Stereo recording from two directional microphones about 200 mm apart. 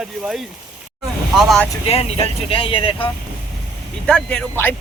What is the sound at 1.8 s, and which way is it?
Speech, 30° left (ahead or behind).